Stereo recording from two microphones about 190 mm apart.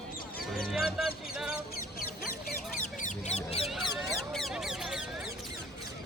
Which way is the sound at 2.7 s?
40° left (ahead or behind).